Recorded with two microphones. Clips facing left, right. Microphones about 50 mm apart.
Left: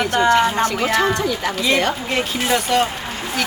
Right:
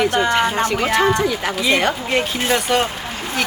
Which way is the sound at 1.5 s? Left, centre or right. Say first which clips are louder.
Right 1 dB; centre.